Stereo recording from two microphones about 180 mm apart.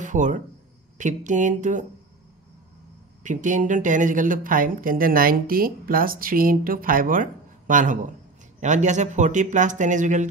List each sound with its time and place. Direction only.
0.0 s speech: 45° right (ahead or behind)
3.3 s speech: 45° right (ahead or behind)